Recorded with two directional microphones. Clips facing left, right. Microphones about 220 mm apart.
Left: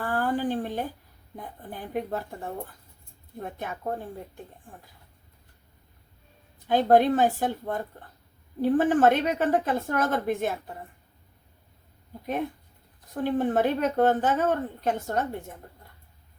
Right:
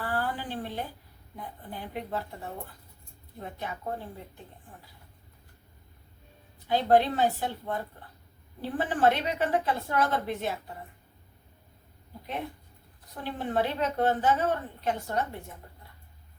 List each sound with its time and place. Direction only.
0.0 s a sound: 45° left (ahead or behind)
1.4 s a woman's voice: 45° left (ahead or behind)
6.7 s a woman's voice: 50° left (ahead or behind)
13.2 s a woman's voice: 45° left (ahead or behind)